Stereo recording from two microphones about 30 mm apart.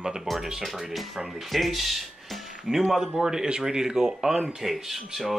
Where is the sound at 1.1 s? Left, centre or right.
Centre.